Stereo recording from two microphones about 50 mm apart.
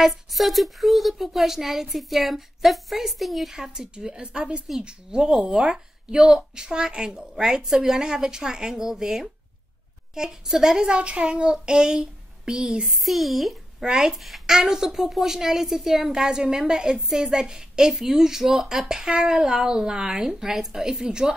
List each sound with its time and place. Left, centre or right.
0.0 s speech: centre
3.5 s a woman's voice: centre
12.8 s speech: centre
13.8 s a woman's voice: centre
14.1 s a woman's voice: centre